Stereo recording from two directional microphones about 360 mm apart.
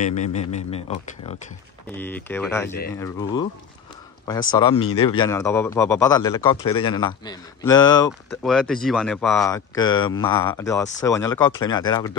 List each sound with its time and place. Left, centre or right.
0.0 s speech: centre
2.0 s speech: centre